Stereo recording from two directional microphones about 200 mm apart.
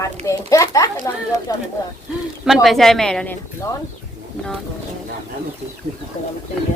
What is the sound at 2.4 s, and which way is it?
Speech, centre (ahead or behind).